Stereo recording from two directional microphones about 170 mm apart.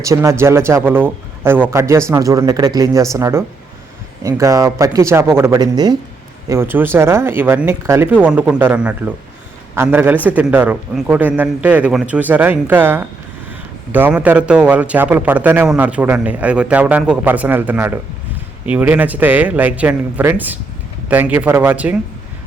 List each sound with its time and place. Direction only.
0.0 s a man's voice: 20° right (ahead or behind)
6.5 s a man's voice: 15° right (ahead or behind)